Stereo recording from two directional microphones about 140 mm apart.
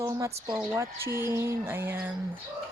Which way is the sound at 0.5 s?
10° right (ahead or behind).